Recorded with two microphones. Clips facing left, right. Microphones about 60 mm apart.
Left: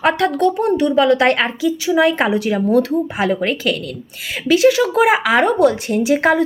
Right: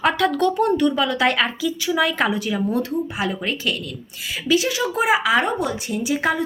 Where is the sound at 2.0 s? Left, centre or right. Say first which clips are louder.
Left 7 dB; left.